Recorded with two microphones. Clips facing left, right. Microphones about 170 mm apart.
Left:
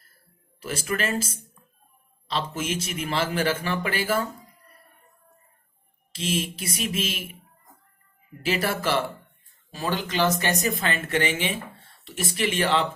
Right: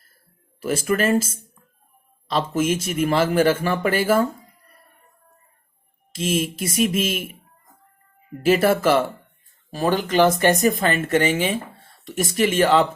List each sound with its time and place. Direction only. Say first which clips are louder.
0.6 s speech: right 7 dB; 45° right (ahead or behind)
2.6 s speech: right 9 dB; 45° right (ahead or behind)
6.1 s speech: right 5 dB; 45° right (ahead or behind)
8.4 s speech: right 9 dB; 45° right (ahead or behind)